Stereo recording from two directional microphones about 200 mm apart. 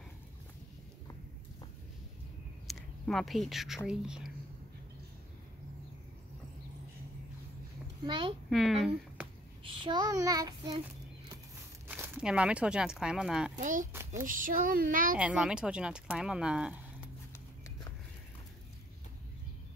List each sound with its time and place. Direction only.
2.7 s speech: centre (ahead or behind)
8.0 s a child's voice: 25° right (ahead or behind)
8.5 s speech: centre (ahead or behind)
9.6 s child singing: 25° right (ahead or behind)
11.9 s speech: 5° right (ahead or behind)
13.6 s speech: 40° right (ahead or behind)
15.1 s speech: 5° right (ahead or behind)